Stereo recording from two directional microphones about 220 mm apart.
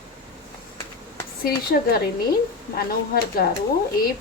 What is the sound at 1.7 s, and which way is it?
A woman's voice, 40° left (ahead or behind).